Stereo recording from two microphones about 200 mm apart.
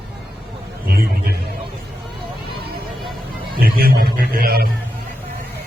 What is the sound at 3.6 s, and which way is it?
Speech, 50° right (ahead or behind).